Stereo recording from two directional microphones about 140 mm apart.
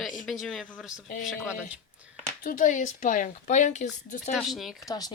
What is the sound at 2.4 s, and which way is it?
Speech, 75° left (ahead or behind).